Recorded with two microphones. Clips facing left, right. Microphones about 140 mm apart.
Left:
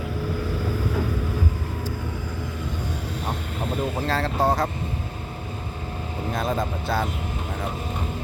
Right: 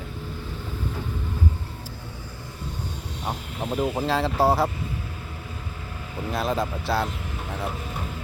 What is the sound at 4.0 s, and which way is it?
Speech, 10° right (ahead or behind).